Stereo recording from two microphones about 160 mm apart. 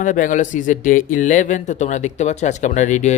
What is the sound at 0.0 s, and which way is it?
Speech, 55° left (ahead or behind).